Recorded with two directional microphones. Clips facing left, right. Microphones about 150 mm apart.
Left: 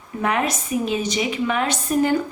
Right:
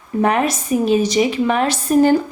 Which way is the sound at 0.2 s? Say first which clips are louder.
Right 5 dB; 35° right (ahead or behind).